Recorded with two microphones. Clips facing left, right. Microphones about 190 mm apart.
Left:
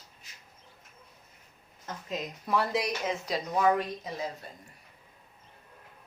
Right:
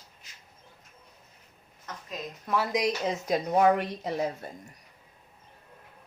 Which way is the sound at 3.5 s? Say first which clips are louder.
Right 3 dB; 60° right (ahead or behind).